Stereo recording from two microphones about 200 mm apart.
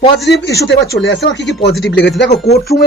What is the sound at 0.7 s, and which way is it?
Speech, 60° left (ahead or behind).